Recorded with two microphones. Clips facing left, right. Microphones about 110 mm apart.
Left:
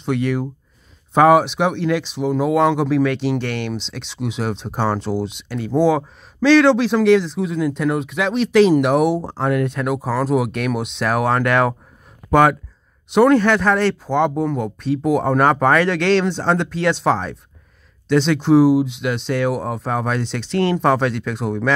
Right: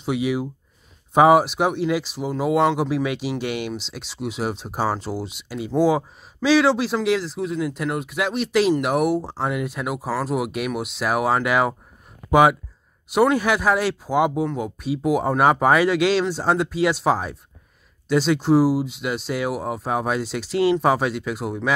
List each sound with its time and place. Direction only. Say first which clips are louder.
0.0 s speech: left 2 dB; 5° right (ahead or behind)